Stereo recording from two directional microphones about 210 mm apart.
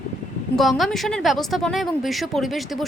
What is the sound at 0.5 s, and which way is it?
A woman's voice, centre (ahead or behind).